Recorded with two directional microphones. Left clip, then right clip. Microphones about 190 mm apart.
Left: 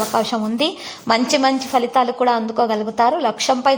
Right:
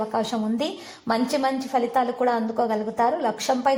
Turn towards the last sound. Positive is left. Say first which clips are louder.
# left 5 dB
turn(degrees=30)  # may be behind; listen again after turning